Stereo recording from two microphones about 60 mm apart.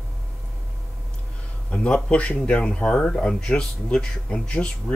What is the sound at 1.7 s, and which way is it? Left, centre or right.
Speech, centre.